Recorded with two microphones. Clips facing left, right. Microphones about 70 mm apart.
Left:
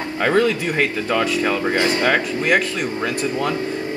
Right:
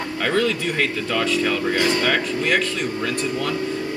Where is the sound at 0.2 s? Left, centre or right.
Centre.